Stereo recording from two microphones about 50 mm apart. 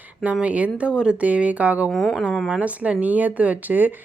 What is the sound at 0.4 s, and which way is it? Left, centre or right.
Speech, right.